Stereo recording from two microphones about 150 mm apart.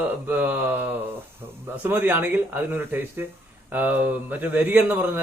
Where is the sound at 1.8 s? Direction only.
10° right (ahead or behind).